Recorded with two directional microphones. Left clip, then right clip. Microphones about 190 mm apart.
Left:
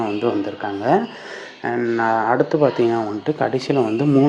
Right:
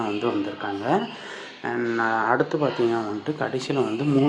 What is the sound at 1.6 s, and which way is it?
Speech, 20° left (ahead or behind).